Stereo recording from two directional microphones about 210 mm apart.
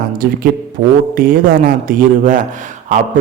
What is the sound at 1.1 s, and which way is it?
Mantra, 40° right (ahead or behind).